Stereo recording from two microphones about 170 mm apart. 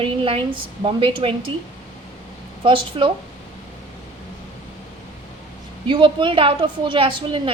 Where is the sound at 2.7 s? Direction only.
30° right (ahead or behind).